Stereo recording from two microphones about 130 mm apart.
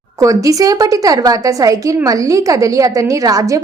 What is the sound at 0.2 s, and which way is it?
Speech, 25° right (ahead or behind).